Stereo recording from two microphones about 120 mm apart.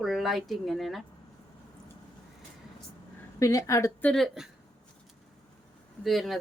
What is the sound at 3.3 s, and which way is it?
Speech, 25° left (ahead or behind).